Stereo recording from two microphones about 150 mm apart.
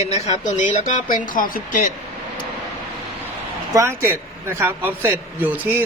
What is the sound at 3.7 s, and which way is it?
Speech, 15° right (ahead or behind).